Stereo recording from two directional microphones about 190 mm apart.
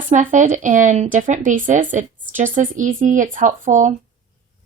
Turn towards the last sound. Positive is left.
turn(degrees=-40)  # may be behind; listen again after turning